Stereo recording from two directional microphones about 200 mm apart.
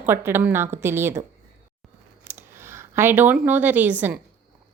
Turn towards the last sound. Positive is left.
turn(degrees=-10)  # may be behind; listen again after turning